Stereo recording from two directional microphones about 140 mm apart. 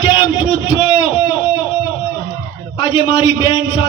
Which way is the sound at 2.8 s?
35° left (ahead or behind).